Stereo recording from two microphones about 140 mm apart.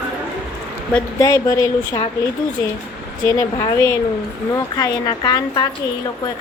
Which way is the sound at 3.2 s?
25° left (ahead or behind).